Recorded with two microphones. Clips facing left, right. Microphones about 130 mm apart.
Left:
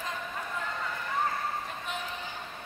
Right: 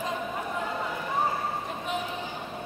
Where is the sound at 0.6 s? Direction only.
15° right (ahead or behind).